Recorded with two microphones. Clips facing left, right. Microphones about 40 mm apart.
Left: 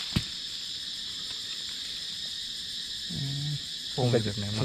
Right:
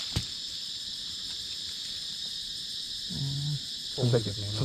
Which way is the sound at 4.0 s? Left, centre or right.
Left.